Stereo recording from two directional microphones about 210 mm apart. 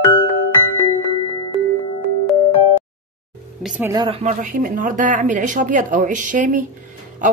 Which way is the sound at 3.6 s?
5° right (ahead or behind).